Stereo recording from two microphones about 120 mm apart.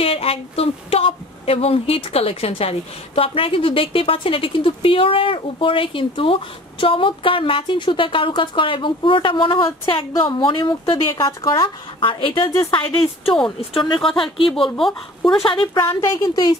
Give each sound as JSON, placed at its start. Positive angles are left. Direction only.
{"t": 0.0, "sound": "female singing", "side_deg": 55}
{"t": 14.8, "sound": "speech", "side_deg": 0}
{"t": 15.4, "sound": "female singing", "side_deg": 45}
{"t": 16.0, "sound": "speech", "side_deg": 30}